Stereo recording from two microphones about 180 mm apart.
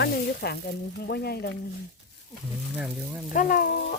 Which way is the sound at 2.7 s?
5° right (ahead or behind).